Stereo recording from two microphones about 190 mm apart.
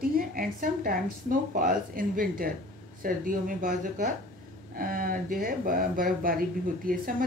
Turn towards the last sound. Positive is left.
turn(degrees=-50)  # may be behind; listen again after turning